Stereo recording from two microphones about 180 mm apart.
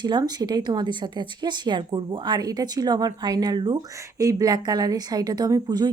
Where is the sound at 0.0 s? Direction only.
25° right (ahead or behind).